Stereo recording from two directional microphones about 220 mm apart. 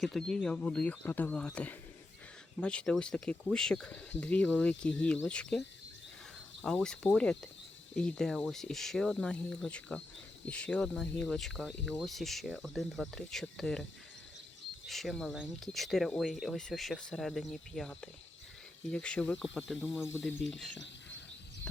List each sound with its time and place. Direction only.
0.0 s speech: centre (ahead or behind)
14.8 s speech: centre (ahead or behind)